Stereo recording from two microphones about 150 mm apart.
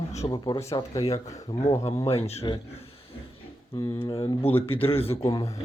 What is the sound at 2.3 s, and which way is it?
Speech, 40° left (ahead or behind).